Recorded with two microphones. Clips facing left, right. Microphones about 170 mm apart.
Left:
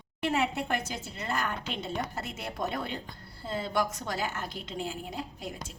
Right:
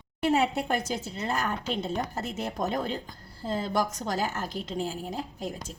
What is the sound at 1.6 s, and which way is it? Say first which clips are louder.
A woman's voice: right 4 dB; 40° right (ahead or behind).